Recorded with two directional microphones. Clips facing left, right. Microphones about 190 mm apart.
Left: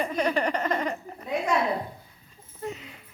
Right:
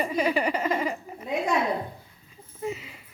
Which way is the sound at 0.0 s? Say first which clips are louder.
Right 1 dB; 5° right (ahead or behind).